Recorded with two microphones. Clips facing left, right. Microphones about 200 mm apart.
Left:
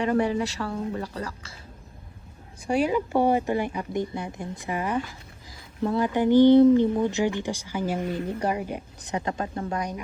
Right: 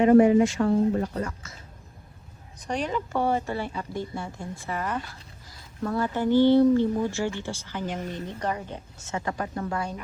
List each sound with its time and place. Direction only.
0.3 s speech: 35° left (ahead or behind)
0.6 s speech: 35° right (ahead or behind)
1.2 s speech: 35° left (ahead or behind)
2.6 s speech: 10° left (ahead or behind)
8.0 s speech: 35° left (ahead or behind)
8.4 s speech: 10° left (ahead or behind)